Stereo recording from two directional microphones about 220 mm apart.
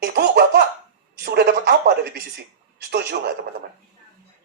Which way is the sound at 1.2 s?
45° right (ahead or behind).